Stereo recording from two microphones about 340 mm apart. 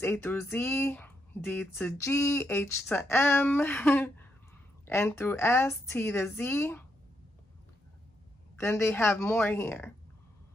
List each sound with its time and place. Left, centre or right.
0.0 s speech: centre
8.5 s speech: centre